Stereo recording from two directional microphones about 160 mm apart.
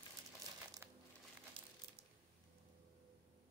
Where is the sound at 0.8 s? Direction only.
15° right (ahead or behind).